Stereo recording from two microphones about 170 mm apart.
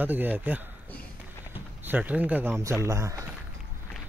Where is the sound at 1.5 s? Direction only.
10° right (ahead or behind).